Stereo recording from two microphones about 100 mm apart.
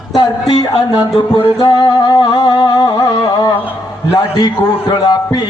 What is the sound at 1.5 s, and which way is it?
Music, 40° left (ahead or behind).